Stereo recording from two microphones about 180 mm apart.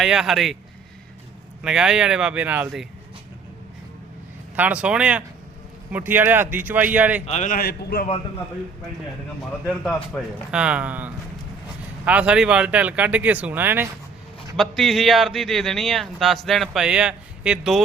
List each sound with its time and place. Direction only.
0.0 s a man's voice: centre (ahead or behind)
1.6 s a man's voice: 5° right (ahead or behind)
4.5 s speech: 10° right (ahead or behind)
7.3 s a man's voice: 40° left (ahead or behind); by 8.0 s 60° left (ahead or behind)
9.6 s a man's voice: 5° left (ahead or behind); by 13.9 s 10° right (ahead or behind)
14.5 s a man's voice: centre (ahead or behind)